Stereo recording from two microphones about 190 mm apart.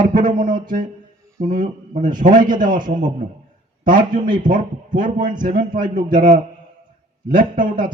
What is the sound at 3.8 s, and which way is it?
Speech, 45° right (ahead or behind).